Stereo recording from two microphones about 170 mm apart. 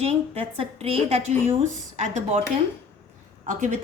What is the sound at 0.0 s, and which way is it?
A woman's voice, 35° right (ahead or behind).